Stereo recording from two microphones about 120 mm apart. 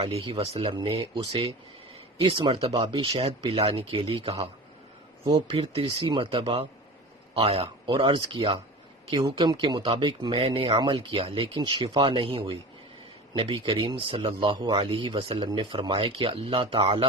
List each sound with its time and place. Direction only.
0.0 s speech: 55° right (ahead or behind)